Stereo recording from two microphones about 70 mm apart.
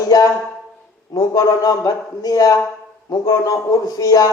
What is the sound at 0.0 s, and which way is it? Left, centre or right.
A man's voice, left.